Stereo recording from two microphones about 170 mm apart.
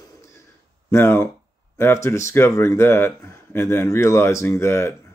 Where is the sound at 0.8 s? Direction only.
15° left (ahead or behind).